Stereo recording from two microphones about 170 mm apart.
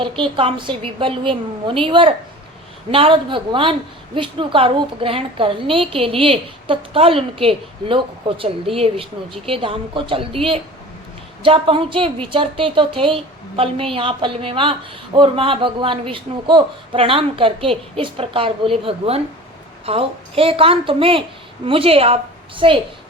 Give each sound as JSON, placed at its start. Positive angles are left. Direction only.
{"t": 0.0, "sound": "a woman's voice", "side_deg": -30}